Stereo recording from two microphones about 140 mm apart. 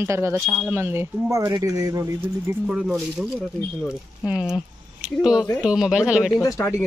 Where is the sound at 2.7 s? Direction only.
5° right (ahead or behind).